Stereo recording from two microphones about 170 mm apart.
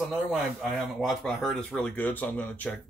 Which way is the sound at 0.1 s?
Centre (ahead or behind).